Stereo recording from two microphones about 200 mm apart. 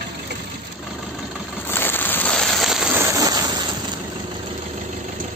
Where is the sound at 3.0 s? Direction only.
20° right (ahead or behind).